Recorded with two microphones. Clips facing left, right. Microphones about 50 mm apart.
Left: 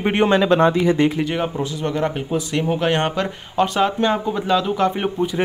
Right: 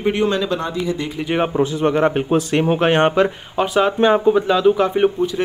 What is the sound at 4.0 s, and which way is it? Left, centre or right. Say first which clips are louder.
Speech: right 6 dB; right.